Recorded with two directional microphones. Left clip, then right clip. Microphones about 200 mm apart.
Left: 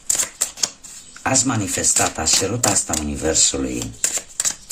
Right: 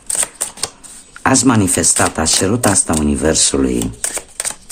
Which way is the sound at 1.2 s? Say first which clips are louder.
Right 7 dB; 35° right (ahead or behind).